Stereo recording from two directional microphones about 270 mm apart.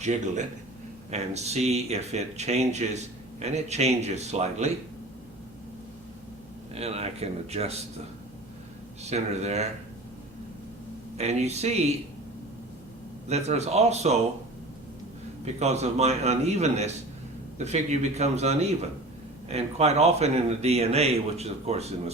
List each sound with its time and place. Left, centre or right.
0.0 s a man's voice: right
6.7 s a man's voice: right
9.0 s a man's voice: right
11.2 s a man's voice: right
13.2 s a man's voice: right
15.5 s a man's voice: right